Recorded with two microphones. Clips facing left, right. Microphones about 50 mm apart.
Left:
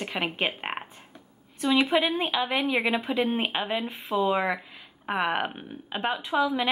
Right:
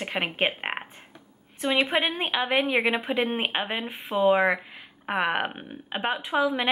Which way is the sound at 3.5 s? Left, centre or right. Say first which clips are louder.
Even; right.